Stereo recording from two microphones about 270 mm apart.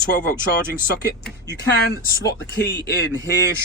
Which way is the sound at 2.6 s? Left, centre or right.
Left.